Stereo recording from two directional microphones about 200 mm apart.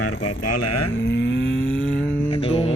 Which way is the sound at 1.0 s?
60° left (ahead or behind).